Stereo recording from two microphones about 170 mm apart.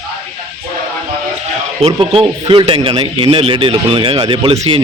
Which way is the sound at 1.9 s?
30° right (ahead or behind).